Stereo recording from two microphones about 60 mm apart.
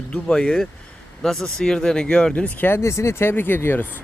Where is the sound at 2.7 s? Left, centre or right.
Left.